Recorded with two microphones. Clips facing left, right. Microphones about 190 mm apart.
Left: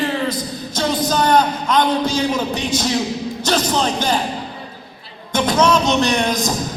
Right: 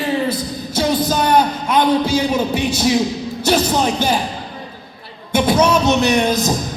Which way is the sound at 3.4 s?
10° right (ahead or behind).